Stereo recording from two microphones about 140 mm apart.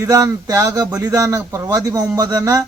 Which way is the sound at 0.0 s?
25° right (ahead or behind).